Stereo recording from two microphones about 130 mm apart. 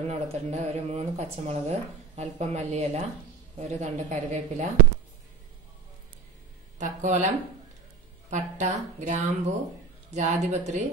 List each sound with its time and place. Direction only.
0.1 s speech: 60° right (ahead or behind)
6.8 s speech: 70° right (ahead or behind)
8.3 s speech: 65° right (ahead or behind)